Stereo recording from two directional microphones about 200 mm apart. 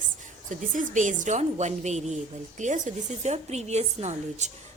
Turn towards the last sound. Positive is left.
turn(degrees=-35)  # may be behind; listen again after turning